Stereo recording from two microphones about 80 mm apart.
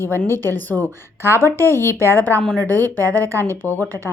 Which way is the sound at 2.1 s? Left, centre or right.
Left.